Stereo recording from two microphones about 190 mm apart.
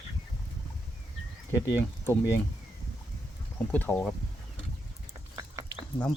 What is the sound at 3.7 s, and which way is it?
Speech, 10° left (ahead or behind).